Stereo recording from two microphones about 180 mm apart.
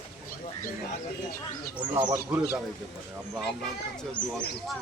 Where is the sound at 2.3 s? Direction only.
5° right (ahead or behind).